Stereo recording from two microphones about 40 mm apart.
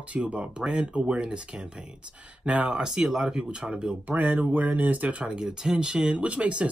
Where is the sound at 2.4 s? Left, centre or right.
Right.